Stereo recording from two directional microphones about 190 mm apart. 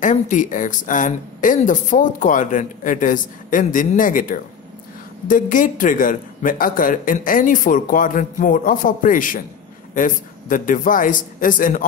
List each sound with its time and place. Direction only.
0.0 s speech: 40° left (ahead or behind)